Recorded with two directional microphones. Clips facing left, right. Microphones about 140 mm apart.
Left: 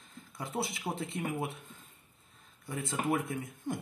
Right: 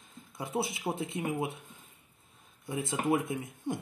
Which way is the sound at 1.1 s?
15° right (ahead or behind).